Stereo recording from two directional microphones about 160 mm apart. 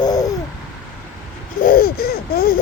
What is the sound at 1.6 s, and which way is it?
Laughter, 70° left (ahead or behind).